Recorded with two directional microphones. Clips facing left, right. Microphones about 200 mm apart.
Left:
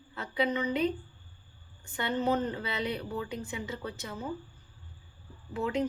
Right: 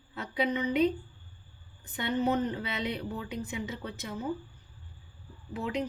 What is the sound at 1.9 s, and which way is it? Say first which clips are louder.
A woman's voice: right 1 dB; 20° right (ahead or behind).